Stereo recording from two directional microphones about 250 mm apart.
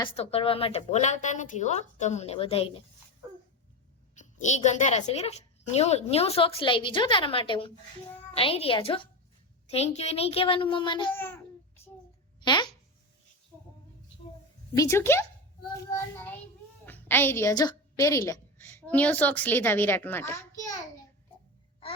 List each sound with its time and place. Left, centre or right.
0.2 s a woman's voice: left
4.1 s a woman's voice: left
11.1 s speech: centre
12.4 s speech: centre
13.5 s a sound: centre
14.8 s a child's voice: centre